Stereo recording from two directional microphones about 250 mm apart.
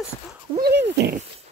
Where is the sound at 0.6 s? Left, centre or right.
Right.